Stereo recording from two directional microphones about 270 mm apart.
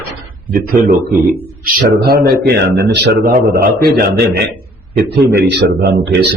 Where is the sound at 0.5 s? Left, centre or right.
Right.